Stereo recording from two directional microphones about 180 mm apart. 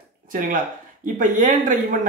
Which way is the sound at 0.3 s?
50° right (ahead or behind).